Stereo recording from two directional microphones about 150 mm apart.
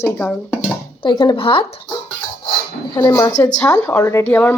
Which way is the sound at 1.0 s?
35° left (ahead or behind).